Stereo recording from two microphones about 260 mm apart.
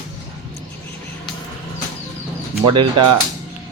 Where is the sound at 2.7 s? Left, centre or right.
Centre.